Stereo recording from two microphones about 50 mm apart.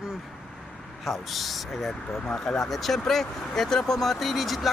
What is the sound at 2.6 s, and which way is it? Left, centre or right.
Speech, centre.